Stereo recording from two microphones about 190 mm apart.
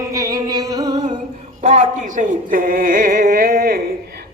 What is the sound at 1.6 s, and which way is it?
Music, 35° right (ahead or behind).